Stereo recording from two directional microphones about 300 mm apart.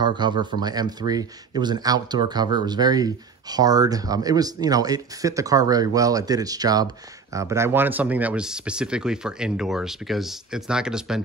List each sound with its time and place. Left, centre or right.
0.0 s speech: centre